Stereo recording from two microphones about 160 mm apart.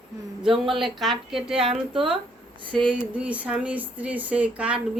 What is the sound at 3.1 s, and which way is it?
Speech, 10° right (ahead or behind).